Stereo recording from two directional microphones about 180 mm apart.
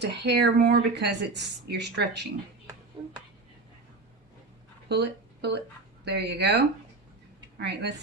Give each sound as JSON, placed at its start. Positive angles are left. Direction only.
{"t": 0.0, "sound": "a woman's voice", "side_deg": -70}
{"t": 3.0, "sound": "a sound", "side_deg": -25}
{"t": 4.9, "sound": "a woman's voice", "side_deg": -65}
{"t": 7.6, "sound": "speech", "side_deg": -65}